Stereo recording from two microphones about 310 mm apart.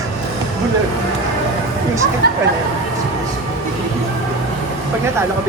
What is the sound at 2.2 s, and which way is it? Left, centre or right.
Speech, right.